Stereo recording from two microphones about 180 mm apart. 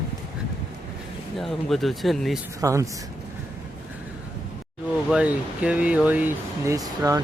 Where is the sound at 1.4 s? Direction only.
Centre (ahead or behind).